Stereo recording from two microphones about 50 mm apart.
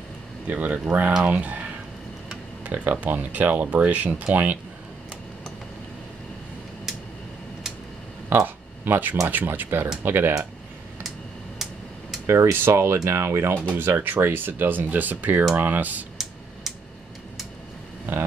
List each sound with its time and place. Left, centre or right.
0.5 s speech: right
2.6 s speech: right
8.3 s speech: right
11.1 s a sound: centre
12.3 s speech: right
12.5 s speech: right
13.7 s speech: right
18.1 s speech: right